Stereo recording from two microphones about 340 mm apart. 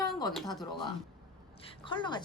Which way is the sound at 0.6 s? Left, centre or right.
Centre.